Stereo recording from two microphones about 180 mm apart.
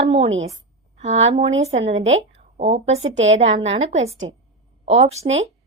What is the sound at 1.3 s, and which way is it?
Speech, 35° right (ahead or behind).